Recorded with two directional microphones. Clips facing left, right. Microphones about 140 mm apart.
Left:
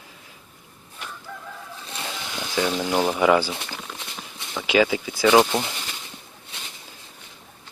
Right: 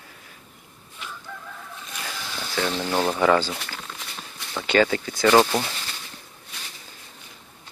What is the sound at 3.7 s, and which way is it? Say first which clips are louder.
Horse: left 1 dB; 10° left (ahead or behind).